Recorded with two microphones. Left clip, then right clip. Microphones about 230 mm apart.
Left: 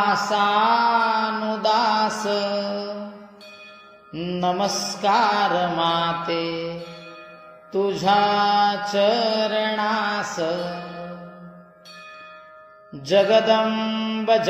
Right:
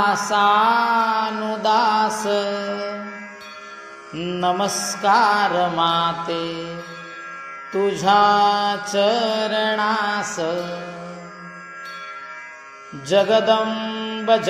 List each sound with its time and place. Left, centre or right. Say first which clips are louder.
0.3 s mantra: right 4 dB; right
2.2 s music: right 2 dB; right
4.1 s mantra: right 2 dB; right
7.7 s mantra: right 2 dB; right
13.0 s mantra: even; right